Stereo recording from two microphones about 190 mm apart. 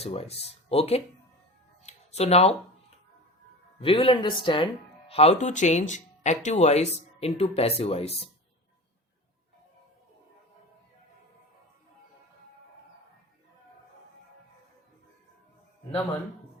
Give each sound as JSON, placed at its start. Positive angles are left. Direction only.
{"t": 0.0, "sound": "speech", "side_deg": 30}
{"t": 1.8, "sound": "a sound", "side_deg": 35}
{"t": 3.8, "sound": "a man's voice", "side_deg": 30}